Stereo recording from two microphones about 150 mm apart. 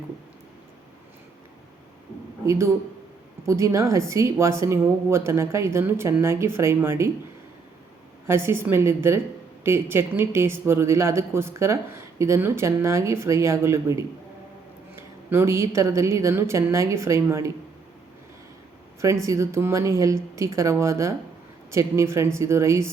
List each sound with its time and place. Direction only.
2.5 s a woman's voice: 15° right (ahead or behind)
8.3 s a woman's voice: 15° right (ahead or behind)
19.2 s a woman's voice: 20° right (ahead or behind)